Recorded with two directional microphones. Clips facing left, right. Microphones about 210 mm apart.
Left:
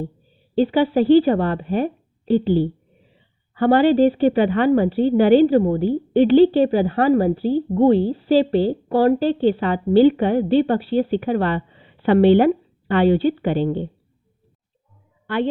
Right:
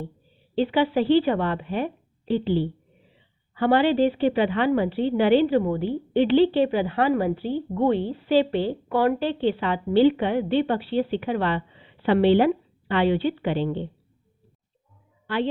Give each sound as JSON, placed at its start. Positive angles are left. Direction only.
{"t": 0.5, "sound": "a woman's voice", "side_deg": 40}
{"t": 15.3, "sound": "a woman's voice", "side_deg": 50}